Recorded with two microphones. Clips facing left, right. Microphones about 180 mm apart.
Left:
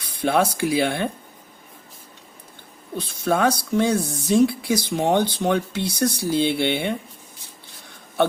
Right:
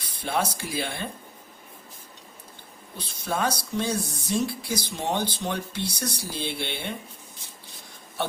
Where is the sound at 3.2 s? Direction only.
60° left (ahead or behind).